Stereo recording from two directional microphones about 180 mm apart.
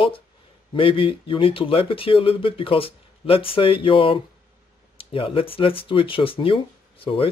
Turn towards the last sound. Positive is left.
turn(degrees=30)  # may be behind; listen again after turning